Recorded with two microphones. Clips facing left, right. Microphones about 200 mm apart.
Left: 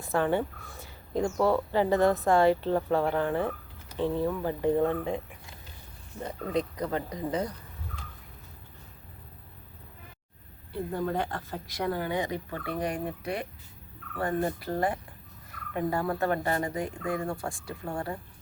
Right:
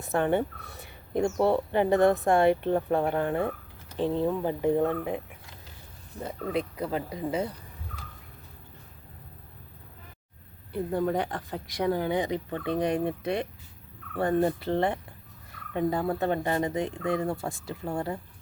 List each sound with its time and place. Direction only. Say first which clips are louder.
0.0 s speech: right 1 dB; 20° right (ahead or behind)
6.1 s speech: even; 10° right (ahead or behind)
10.9 s speech: right 3 dB; 20° right (ahead or behind)